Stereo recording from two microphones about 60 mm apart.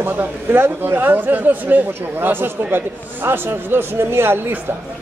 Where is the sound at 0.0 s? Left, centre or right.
Right.